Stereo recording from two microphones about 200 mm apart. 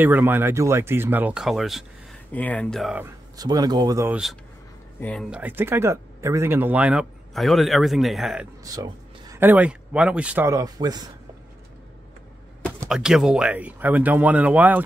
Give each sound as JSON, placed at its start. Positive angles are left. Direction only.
{"t": 0.0, "sound": "speech", "side_deg": -10}
{"t": 3.3, "sound": "speech", "side_deg": -20}
{"t": 5.0, "sound": "speech", "side_deg": 5}
{"t": 8.6, "sound": "speech", "side_deg": -20}
{"t": 12.8, "sound": "speech", "side_deg": 0}